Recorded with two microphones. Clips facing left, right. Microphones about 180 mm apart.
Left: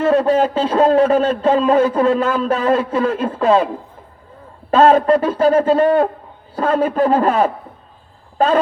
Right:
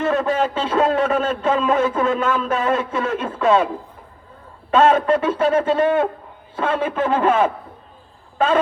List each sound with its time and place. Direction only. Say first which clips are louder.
0.0 s a man's voice: left 5 dB; 35° left (ahead or behind)
4.7 s a man's voice: left 4 dB; 35° left (ahead or behind)